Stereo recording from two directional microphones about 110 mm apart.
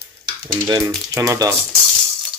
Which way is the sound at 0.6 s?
35° right (ahead or behind).